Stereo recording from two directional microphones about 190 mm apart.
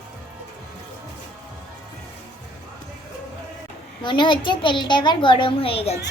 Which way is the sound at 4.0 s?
25° left (ahead or behind).